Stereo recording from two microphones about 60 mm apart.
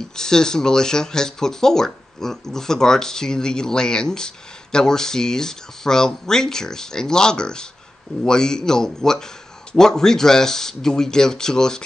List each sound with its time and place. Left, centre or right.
0.1 s speech: centre